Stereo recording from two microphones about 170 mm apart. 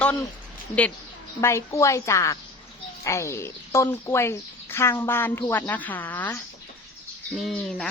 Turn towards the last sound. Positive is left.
turn(degrees=5)  # may be behind; listen again after turning